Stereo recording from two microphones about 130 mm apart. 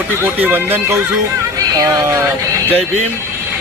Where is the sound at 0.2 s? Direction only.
15° right (ahead or behind).